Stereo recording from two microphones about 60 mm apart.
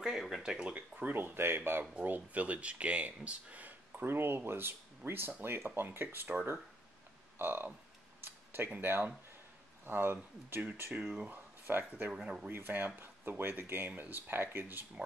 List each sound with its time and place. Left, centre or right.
0.0 s speech: centre; by 1.1 s right
1.1 s speech: right
2.0 s speech: right
4.1 s speech: right
7.3 s speech: right
8.2 s a sound: right
9.8 s speech: right
12.1 s speech: centre
12.4 s speech: right